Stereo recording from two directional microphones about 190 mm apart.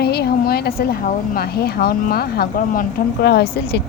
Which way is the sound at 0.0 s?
55° left (ahead or behind).